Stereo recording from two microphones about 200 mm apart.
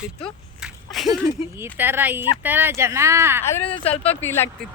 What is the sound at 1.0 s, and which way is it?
Speech, 15° right (ahead or behind).